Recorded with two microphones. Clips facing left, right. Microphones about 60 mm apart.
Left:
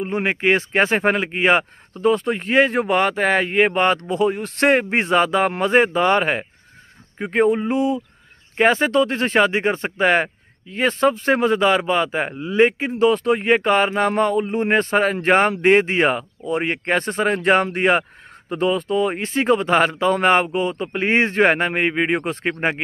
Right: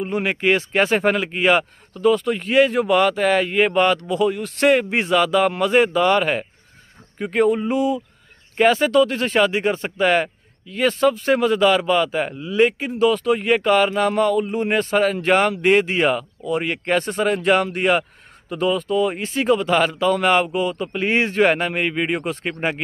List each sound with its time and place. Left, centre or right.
0.0 s speech: left
7.2 s a sound: left
8.5 s speech: left